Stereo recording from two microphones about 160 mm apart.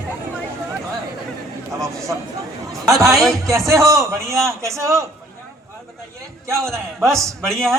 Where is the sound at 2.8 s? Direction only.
20° right (ahead or behind).